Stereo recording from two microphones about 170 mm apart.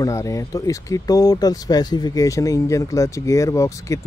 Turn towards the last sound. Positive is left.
turn(degrees=20)  # may be behind; listen again after turning